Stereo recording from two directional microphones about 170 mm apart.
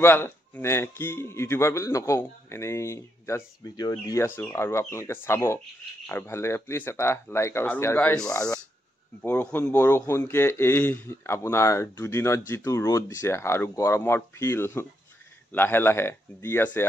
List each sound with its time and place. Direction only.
0.0 s a man's voice: 15° left (ahead or behind)
8.3 s speech: 20° left (ahead or behind)
9.2 s a man's voice: 10° left (ahead or behind)